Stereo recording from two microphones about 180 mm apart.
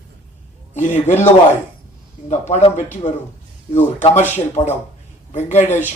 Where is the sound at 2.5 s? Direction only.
40° left (ahead or behind).